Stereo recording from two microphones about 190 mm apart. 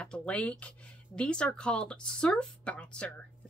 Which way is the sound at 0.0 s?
5° left (ahead or behind).